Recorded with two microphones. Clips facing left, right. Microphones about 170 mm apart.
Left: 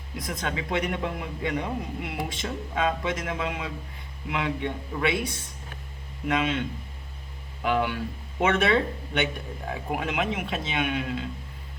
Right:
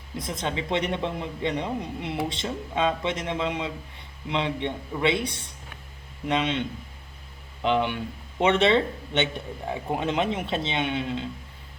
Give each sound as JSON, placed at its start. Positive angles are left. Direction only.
{"t": 0.2, "sound": "speech", "side_deg": -25}